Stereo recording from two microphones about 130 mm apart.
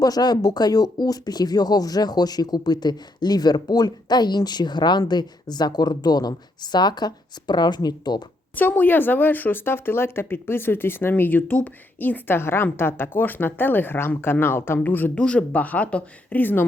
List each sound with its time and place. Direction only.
0.0 s speech: 30° left (ahead or behind)
8.5 s speech: 15° left (ahead or behind)